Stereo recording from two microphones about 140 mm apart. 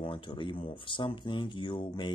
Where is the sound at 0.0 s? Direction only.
35° left (ahead or behind).